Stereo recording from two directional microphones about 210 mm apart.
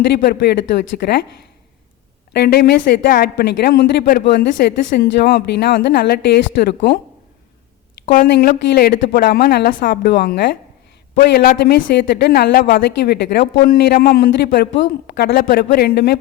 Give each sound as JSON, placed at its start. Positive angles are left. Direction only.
{"t": 0.1, "sound": "speech", "side_deg": 50}
{"t": 2.3, "sound": "speech", "side_deg": 50}
{"t": 8.1, "sound": "speech", "side_deg": 45}